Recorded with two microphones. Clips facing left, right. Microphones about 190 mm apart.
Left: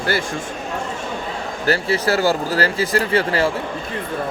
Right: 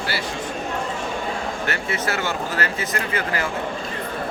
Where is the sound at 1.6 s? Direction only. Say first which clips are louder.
Left 10 dB; 35° left (ahead or behind).